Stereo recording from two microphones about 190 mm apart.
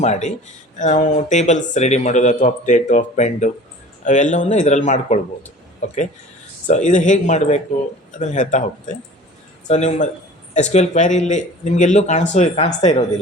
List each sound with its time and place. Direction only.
0.0 s speech: 40° left (ahead or behind)